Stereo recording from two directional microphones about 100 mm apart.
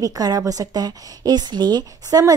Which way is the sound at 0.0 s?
40° right (ahead or behind).